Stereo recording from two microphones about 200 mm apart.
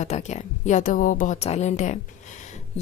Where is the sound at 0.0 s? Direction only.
35° left (ahead or behind).